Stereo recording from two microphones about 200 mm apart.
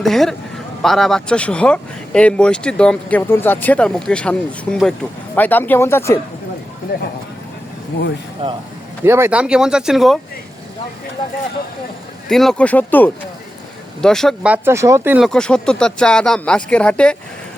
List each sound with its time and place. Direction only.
0.0 s speech: centre (ahead or behind)
8.4 s speech: 30° right (ahead or behind)
9.0 s speech: 10° right (ahead or behind)
12.3 s speech: centre (ahead or behind)
15.3 s speech: 5° left (ahead or behind)